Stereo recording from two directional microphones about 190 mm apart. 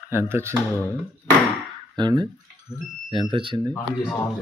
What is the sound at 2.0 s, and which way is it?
Speech, 20° right (ahead or behind).